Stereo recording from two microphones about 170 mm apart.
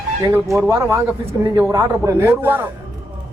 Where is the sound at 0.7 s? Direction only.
15° right (ahead or behind).